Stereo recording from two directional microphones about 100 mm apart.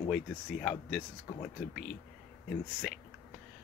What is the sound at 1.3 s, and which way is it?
Speech, 25° left (ahead or behind).